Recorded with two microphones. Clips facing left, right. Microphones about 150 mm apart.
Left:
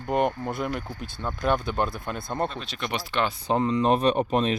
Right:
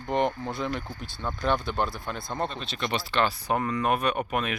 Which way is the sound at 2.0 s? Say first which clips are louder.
Left 2 dB; 15° left (ahead or behind).